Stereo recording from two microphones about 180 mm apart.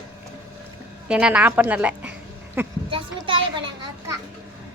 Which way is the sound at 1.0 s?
5° right (ahead or behind).